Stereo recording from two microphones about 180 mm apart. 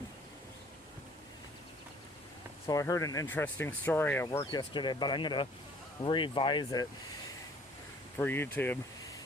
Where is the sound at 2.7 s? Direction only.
20° left (ahead or behind).